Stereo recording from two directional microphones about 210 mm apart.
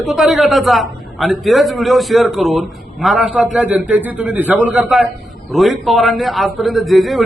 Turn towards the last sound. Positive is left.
turn(degrees=0)  # may be behind; listen again after turning